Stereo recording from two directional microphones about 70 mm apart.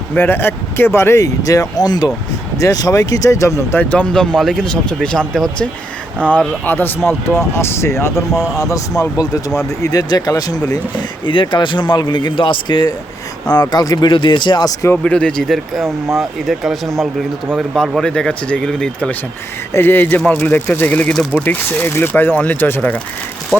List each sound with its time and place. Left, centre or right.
0.1 s speech: left
1.2 s speech: left
2.6 s speech: left
3.8 s speech: centre
6.7 s speech: left
9.0 s speech: left
11.5 s speech: left
13.5 s speech: left
15.0 s speech: centre
15.5 s speech: centre
19.7 s speech: left